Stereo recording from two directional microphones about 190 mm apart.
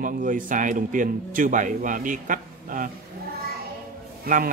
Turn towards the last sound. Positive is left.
turn(degrees=-50)  # may be behind; listen again after turning